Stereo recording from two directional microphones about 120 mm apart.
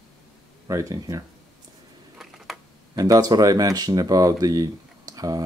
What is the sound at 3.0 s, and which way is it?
Speech, 30° right (ahead or behind).